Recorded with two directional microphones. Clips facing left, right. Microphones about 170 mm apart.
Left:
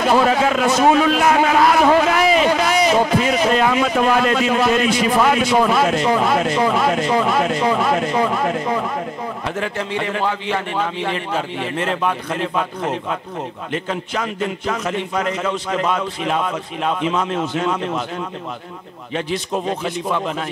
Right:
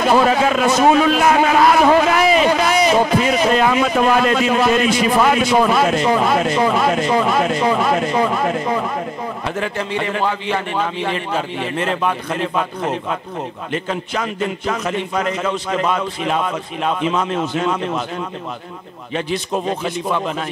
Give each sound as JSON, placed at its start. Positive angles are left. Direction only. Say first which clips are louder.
{"t": 0.0, "sound": "a man's voice", "louder": "right 1 dB", "side_deg": -15}
{"t": 20.1, "sound": "speech", "louder": "right 1 dB", "side_deg": -20}